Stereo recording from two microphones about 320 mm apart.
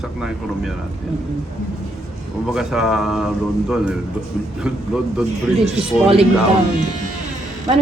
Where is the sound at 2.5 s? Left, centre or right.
Centre.